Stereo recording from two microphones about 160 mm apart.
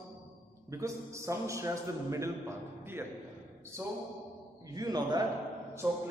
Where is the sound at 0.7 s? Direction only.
20° right (ahead or behind).